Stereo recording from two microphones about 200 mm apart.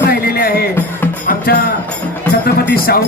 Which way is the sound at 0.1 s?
50° left (ahead or behind).